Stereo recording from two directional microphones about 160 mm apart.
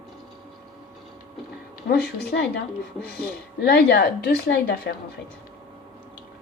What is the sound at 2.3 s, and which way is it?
Speech, 85° left.